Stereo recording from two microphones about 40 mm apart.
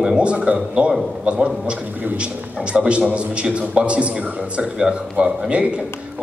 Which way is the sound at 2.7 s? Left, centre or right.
Right.